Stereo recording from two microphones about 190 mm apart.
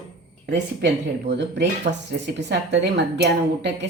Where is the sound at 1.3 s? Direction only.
65° right (ahead or behind).